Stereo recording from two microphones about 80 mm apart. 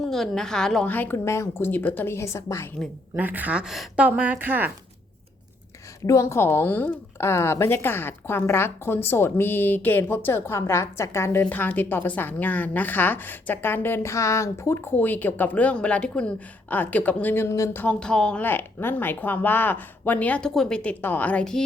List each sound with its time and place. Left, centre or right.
0.0 s a woman's voice: centre
0.9 s a woman's voice: left
1.1 s a woman's voice: left
2.1 s a woman's voice: left
3.2 s speech: right
6.1 s a woman's voice: left
11.4 s a woman's voice: centre
18.0 s a woman's voice: centre
18.4 s a woman's voice: left
20.5 s a woman's voice: centre
21.0 s a woman's voice: left